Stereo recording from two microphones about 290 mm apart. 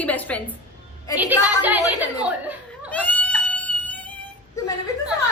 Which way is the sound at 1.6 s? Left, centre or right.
Centre.